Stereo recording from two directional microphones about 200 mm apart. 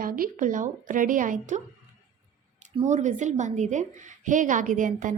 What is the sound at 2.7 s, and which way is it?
A woman's voice, 30° right (ahead or behind).